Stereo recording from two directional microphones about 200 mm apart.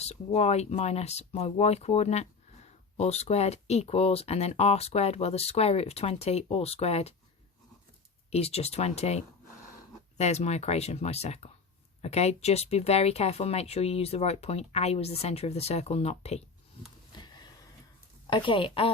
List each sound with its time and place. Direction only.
0.0 s speech: 30° left (ahead or behind)
8.3 s speech: 30° left (ahead or behind)
17.2 s a sound: 20° left (ahead or behind)
18.3 s a woman's voice: 25° left (ahead or behind)